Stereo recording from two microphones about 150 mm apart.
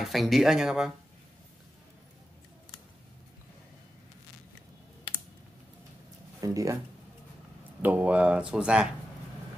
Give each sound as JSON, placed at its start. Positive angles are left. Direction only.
{"t": 0.0, "sound": "speech", "side_deg": 0}
{"t": 6.4, "sound": "speech", "side_deg": -20}
{"t": 7.8, "sound": "speech", "side_deg": -10}